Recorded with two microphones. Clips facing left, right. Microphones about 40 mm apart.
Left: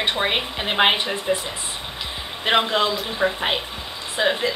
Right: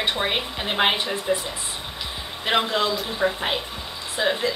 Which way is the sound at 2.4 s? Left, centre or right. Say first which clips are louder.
Left 3 dB; centre.